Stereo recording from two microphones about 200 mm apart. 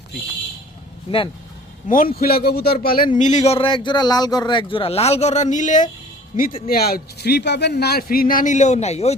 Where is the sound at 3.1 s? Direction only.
35° left (ahead or behind).